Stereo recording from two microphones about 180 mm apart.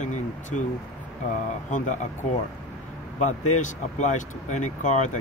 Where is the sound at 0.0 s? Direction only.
40° left (ahead or behind).